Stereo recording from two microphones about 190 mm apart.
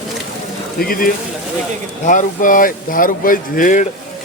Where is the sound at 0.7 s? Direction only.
50° left (ahead or behind).